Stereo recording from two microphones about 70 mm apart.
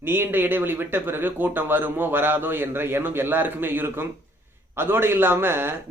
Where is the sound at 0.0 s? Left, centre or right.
Right.